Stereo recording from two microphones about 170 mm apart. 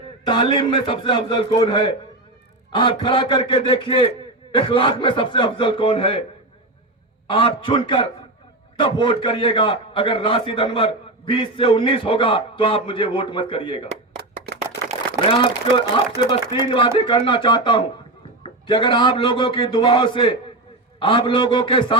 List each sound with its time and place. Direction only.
0.3 s a man's voice: 30° left (ahead or behind)
7.3 s a man's voice: 30° left (ahead or behind)
14.2 s clapping: 70° right (ahead or behind)
16.2 s a man's voice: 30° left (ahead or behind)